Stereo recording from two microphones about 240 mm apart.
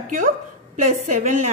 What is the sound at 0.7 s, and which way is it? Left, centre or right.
Speech, right.